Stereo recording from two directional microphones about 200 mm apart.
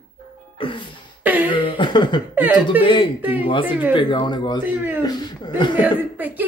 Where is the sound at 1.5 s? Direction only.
25° left (ahead or behind).